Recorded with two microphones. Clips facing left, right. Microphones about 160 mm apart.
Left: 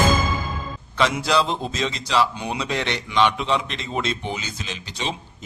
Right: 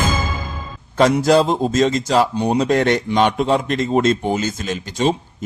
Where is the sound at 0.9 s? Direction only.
45° right (ahead or behind).